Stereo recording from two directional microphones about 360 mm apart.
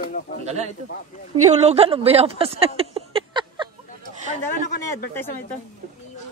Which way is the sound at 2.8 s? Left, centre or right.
Centre.